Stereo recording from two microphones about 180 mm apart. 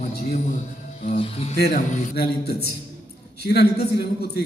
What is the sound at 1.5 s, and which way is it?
Speech, 60° left (ahead or behind).